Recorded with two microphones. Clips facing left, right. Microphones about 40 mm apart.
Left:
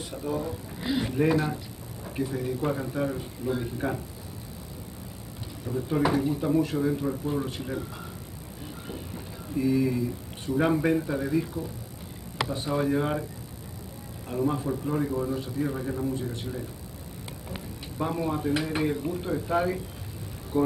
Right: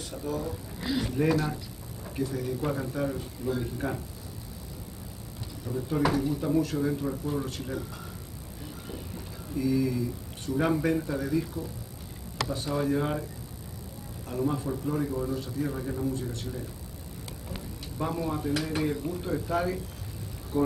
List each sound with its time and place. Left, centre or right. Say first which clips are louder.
0.1 s a man's voice: left 2 dB; centre
5.7 s a man's voice: left 2 dB; centre
8.8 s a man's voice: left 2 dB; centre
14.3 s a man's voice: left 2 dB; centre